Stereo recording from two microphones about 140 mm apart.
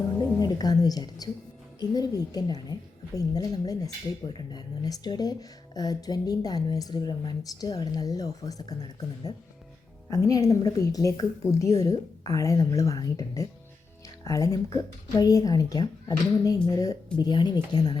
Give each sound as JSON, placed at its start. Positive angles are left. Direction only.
{"t": 0.3, "sound": "speech", "side_deg": 30}